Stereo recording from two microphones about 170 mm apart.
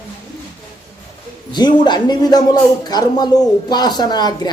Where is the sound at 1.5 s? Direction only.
25° left (ahead or behind).